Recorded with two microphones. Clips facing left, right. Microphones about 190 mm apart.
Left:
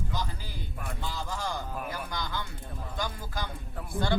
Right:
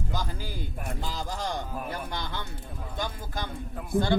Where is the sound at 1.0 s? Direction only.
40° right (ahead or behind).